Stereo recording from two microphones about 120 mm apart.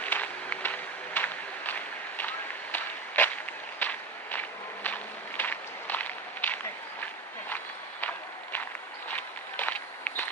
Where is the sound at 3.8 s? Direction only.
15° left (ahead or behind).